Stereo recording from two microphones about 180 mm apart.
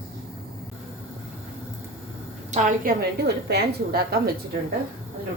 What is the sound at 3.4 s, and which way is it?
Speech, 65° right (ahead or behind).